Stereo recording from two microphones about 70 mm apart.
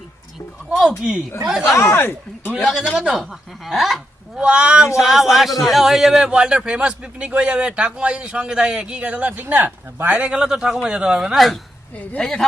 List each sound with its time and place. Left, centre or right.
0.7 s a man's voice: centre
1.7 s speech: left
2.6 s speech: centre
4.4 s a man's voice: centre
5.0 s a man's voice: centre; by 10.3 s right
10.3 s a man's voice: centre
11.3 s speech: centre